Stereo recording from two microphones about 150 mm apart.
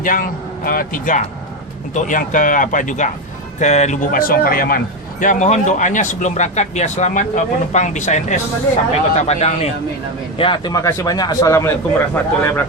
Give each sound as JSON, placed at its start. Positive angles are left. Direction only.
{"t": 0.0, "sound": "speech", "side_deg": 65}
{"t": 5.2, "sound": "speech", "side_deg": 55}
{"t": 10.3, "sound": "speech", "side_deg": 35}